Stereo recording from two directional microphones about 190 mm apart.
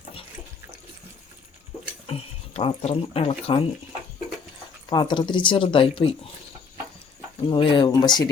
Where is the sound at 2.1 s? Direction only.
30° left (ahead or behind).